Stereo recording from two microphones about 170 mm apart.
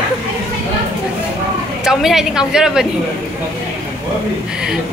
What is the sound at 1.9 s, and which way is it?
A woman's voice, centre (ahead or behind).